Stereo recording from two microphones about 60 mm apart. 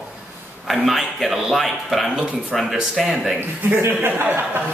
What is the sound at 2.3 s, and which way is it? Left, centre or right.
Speech, centre.